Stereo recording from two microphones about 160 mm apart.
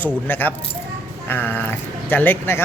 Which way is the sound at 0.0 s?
10° left (ahead or behind).